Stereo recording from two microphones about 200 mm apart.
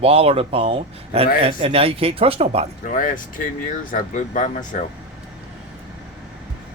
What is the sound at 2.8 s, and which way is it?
Speech, 40° left (ahead or behind).